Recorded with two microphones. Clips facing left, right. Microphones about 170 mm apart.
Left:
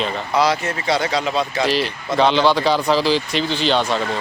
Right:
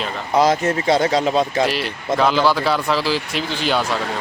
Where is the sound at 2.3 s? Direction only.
5° right (ahead or behind).